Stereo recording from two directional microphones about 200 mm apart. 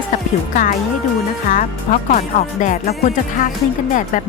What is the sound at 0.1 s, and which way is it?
A woman's voice, 40° left (ahead or behind).